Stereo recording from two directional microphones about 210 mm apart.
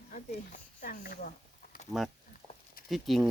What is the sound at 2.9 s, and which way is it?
Speech, centre (ahead or behind).